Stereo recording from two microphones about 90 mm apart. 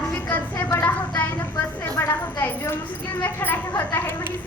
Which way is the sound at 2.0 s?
30° left (ahead or behind).